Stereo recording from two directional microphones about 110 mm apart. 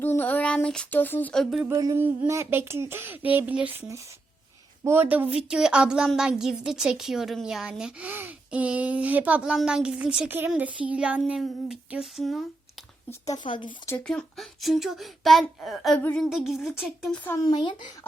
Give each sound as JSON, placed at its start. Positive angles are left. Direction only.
{"t": 0.0, "sound": "child singing", "side_deg": 15}
{"t": 0.9, "sound": "speech", "side_deg": 15}
{"t": 1.3, "sound": "a child's voice", "side_deg": 0}
{"t": 1.7, "sound": "a sound", "side_deg": -30}
{"t": 2.0, "sound": "a woman's voice", "side_deg": -20}
{"t": 13.3, "sound": "a woman's voice", "side_deg": 45}
{"t": 14.1, "sound": "a child's voice", "side_deg": 5}
{"t": 17.3, "sound": "speech", "side_deg": 40}